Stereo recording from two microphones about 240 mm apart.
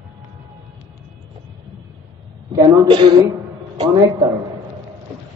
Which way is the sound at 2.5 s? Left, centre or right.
Centre.